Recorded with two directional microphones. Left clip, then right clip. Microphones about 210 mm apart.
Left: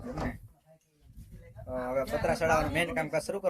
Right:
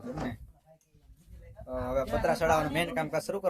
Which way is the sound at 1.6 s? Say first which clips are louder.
Even; 10° right (ahead or behind).